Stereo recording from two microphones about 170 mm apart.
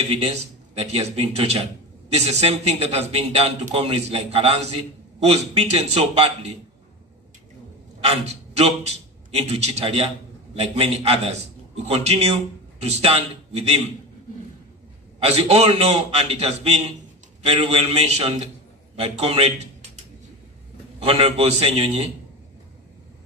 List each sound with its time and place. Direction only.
0.0 s a man's voice: 35° right (ahead or behind)
8.0 s a man's voice: 35° right (ahead or behind)
15.2 s a man's voice: 35° right (ahead or behind)
21.0 s a man's voice: 35° right (ahead or behind)